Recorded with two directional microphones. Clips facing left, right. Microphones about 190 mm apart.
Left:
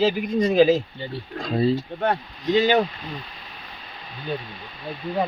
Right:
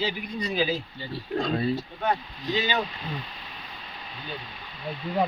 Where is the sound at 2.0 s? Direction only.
60° left (ahead or behind).